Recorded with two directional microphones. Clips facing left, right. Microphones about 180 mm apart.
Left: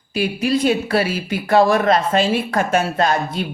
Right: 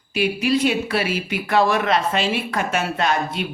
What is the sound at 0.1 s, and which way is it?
Speech, 40° left (ahead or behind).